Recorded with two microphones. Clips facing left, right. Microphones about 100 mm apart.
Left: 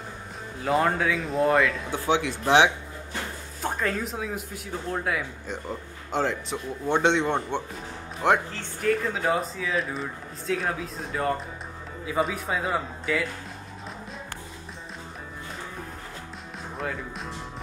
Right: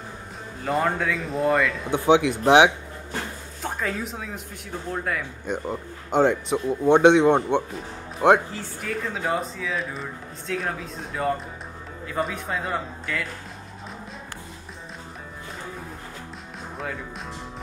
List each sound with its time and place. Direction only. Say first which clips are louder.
0.6 s speech: left 1 dB; centre (ahead or behind)
1.9 s speech: right 6 dB; 20° right (ahead or behind)
3.6 s speech: left 1 dB; centre (ahead or behind)
5.5 s speech: right 10 dB; 20° right (ahead or behind)
8.8 s speech: left 4 dB; centre (ahead or behind)
16.7 s speech: left 1 dB; centre (ahead or behind)